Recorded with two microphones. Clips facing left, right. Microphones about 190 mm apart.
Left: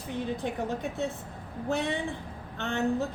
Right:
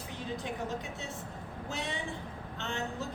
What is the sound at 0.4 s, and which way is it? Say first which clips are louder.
A woman's voice: left 5 dB; 55° left (ahead or behind).